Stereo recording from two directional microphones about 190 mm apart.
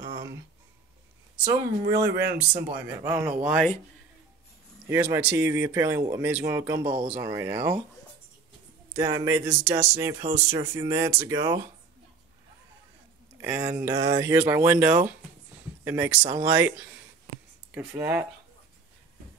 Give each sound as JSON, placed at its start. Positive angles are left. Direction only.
{"t": 0.0, "sound": "a sound", "side_deg": -20}
{"t": 1.4, "sound": "speech", "side_deg": -20}
{"t": 4.8, "sound": "speech", "side_deg": -15}
{"t": 8.9, "sound": "speech", "side_deg": -20}
{"t": 13.4, "sound": "speech", "side_deg": -10}